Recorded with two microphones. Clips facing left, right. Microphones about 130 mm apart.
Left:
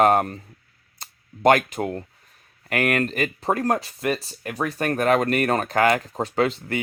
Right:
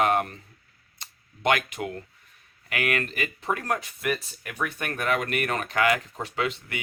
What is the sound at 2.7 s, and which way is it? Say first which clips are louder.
Speech: left 6 dB; 45° left (ahead or behind).